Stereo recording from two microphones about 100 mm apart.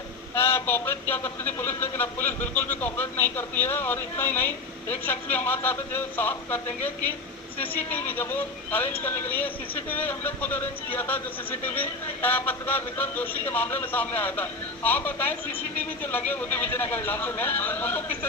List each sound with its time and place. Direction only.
0.3 s speech: 25° left (ahead or behind)